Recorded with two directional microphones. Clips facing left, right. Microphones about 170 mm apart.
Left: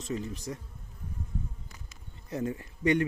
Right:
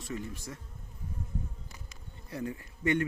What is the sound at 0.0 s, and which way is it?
Speech, 20° left (ahead or behind).